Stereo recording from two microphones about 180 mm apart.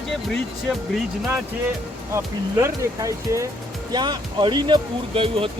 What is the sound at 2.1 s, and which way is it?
Speech, 15° right (ahead or behind).